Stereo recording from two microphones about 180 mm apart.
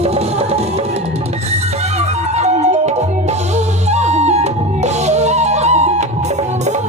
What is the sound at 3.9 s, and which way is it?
Music, 40° right (ahead or behind).